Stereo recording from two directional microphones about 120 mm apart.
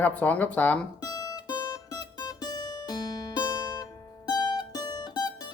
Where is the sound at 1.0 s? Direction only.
30° left (ahead or behind).